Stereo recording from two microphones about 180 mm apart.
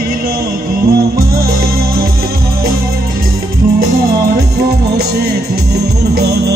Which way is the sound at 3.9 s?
55° right (ahead or behind).